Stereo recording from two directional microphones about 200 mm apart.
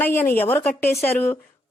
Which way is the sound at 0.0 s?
10° left (ahead or behind).